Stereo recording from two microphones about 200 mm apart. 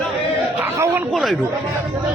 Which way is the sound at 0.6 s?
10° right (ahead or behind).